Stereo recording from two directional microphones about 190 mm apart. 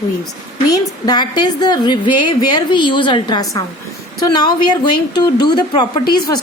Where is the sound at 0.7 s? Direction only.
20° left (ahead or behind).